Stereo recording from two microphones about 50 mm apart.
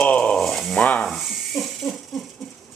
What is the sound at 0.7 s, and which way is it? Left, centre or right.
Sizzle, left.